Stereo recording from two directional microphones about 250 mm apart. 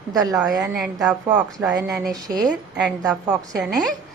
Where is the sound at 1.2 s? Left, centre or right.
Centre.